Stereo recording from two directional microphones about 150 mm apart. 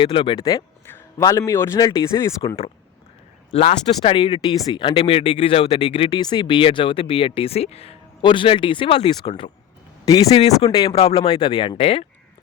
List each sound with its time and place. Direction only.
0.0 s a man's voice: 35° left (ahead or behind); by 2.3 s 20° left (ahead or behind)
3.5 s speech: 45° left (ahead or behind)
10.7 s a man's voice: 25° left (ahead or behind)
10.9 s speech: 40° left (ahead or behind)
11.2 s speech: 30° left (ahead or behind)